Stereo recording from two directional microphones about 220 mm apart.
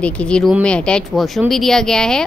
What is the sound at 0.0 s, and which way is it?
A woman's voice, 5° left (ahead or behind).